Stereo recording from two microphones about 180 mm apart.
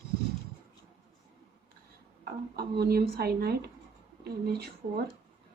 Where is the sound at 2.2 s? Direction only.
60° right (ahead or behind).